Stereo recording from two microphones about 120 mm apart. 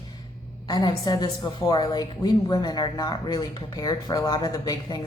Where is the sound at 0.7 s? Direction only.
35° left (ahead or behind).